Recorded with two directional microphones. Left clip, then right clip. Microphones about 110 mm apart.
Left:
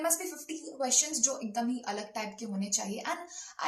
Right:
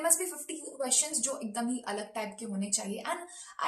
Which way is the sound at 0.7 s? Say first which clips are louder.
Left 2 dB; 15° right (ahead or behind).